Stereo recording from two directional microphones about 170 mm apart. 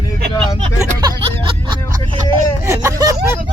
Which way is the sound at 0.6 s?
30° right (ahead or behind).